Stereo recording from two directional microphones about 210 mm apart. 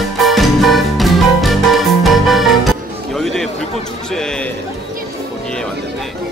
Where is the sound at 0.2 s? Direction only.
Centre (ahead or behind).